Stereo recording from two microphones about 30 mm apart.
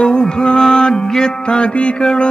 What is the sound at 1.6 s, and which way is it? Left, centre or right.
Music, left.